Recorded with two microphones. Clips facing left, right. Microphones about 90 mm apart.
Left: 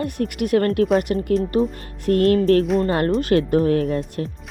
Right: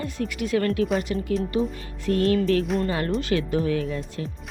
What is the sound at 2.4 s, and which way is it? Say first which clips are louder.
Music: left 6 dB; 40° left (ahead or behind).